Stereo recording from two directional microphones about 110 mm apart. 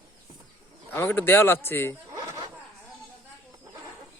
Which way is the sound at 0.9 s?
20° left (ahead or behind).